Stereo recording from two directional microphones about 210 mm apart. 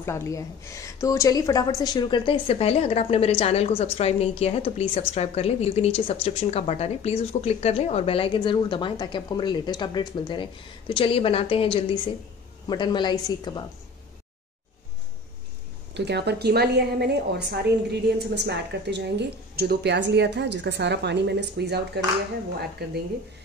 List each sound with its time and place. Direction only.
0.0 s speech: 15° left (ahead or behind)
15.9 s a woman's voice: 55° right (ahead or behind)